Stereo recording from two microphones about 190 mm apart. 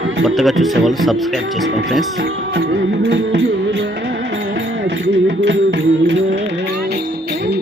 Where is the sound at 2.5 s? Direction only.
60° right (ahead or behind).